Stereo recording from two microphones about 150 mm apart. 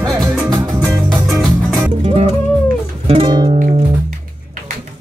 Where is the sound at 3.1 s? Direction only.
30° right (ahead or behind).